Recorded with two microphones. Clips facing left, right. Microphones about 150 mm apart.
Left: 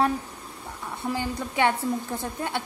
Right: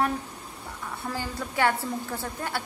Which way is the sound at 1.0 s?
15° left (ahead or behind).